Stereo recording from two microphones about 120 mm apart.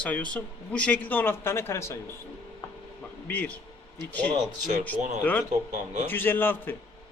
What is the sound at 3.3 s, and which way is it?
Speech, 15° left (ahead or behind).